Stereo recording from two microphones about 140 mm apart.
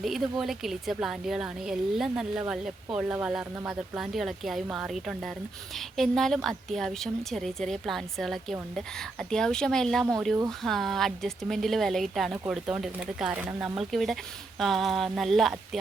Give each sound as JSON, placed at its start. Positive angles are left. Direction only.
{"t": 0.0, "sound": "speech", "side_deg": 0}